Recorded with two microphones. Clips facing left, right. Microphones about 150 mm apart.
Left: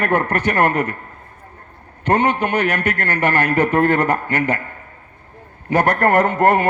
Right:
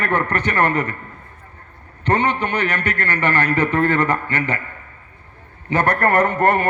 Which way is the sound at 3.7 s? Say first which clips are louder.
Left 3 dB; 45° left (ahead or behind).